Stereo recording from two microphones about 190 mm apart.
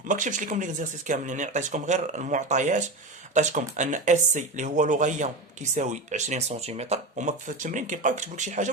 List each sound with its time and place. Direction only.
0.1 s speech: 40° right (ahead or behind)